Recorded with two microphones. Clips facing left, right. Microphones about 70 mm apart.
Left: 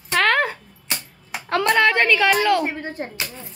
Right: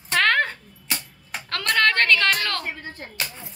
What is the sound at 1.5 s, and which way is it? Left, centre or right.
A woman's voice, centre.